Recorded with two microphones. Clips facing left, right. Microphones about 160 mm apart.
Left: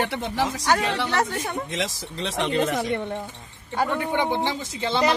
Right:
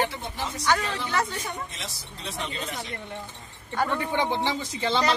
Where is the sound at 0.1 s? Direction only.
85° left.